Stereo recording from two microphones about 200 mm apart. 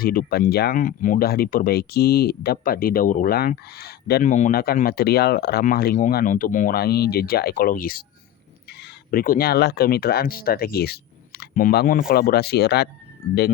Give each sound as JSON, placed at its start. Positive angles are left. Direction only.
{"t": 0.0, "sound": "speech", "side_deg": 45}